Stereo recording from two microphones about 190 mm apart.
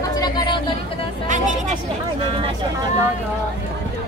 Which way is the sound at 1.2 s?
40° right (ahead or behind).